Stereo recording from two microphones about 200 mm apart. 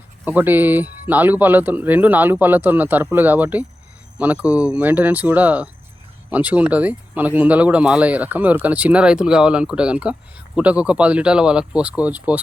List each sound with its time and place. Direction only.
0.3 s speech: 10° right (ahead or behind)